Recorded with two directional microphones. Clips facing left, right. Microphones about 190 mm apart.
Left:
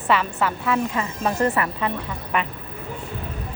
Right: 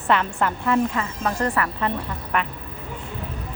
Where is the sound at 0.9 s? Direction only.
20° left (ahead or behind).